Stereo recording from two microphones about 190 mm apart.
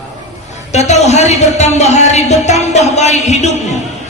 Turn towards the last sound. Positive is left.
turn(degrees=35)  # may be behind; listen again after turning